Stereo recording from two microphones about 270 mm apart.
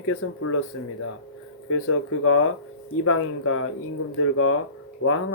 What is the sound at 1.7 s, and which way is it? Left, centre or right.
Speech, left.